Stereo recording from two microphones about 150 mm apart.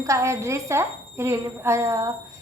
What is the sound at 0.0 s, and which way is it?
A woman's voice, 20° right (ahead or behind).